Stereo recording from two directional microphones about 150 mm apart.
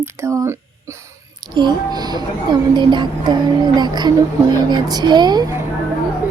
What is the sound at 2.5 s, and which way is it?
Speech, 30° right (ahead or behind).